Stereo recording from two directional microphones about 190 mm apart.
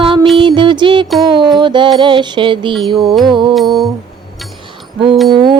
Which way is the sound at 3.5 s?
Centre (ahead or behind).